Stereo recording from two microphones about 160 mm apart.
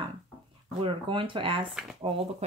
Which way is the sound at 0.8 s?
35° right (ahead or behind).